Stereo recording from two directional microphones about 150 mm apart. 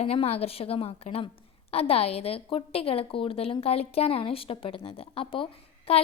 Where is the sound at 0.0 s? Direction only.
40° left (ahead or behind).